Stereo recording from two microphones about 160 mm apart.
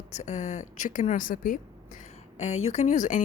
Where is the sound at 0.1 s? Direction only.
45° left (ahead or behind).